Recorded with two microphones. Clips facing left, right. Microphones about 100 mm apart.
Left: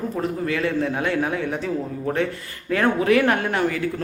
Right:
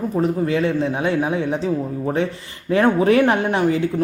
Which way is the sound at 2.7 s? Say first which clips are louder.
Right 3 dB; 25° right (ahead or behind).